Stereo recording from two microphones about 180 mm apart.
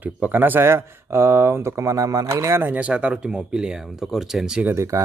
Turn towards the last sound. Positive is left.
turn(degrees=-15)  # may be behind; listen again after turning